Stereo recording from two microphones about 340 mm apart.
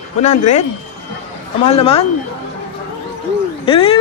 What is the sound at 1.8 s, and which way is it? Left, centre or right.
Speech, centre.